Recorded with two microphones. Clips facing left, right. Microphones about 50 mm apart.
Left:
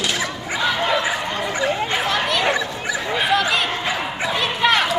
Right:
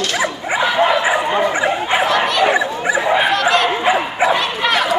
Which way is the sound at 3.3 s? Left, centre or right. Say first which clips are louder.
Right 4 dB; centre.